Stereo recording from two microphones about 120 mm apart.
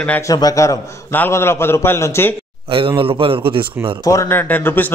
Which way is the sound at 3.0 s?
45° right (ahead or behind).